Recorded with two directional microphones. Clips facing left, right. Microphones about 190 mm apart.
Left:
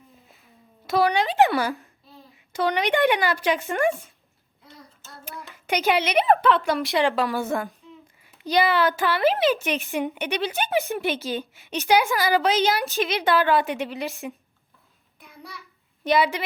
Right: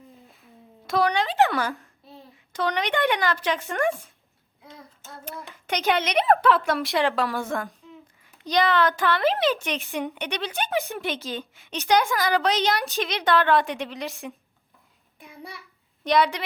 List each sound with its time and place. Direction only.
0.9 s a woman's voice: 5° left (ahead or behind)
4.7 s child singing: 15° right (ahead or behind)
5.8 s a woman's voice: centre (ahead or behind)
16.0 s a woman's voice: 5° left (ahead or behind)